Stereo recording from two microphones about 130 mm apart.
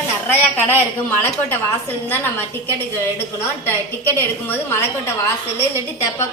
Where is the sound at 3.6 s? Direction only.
15° left (ahead or behind).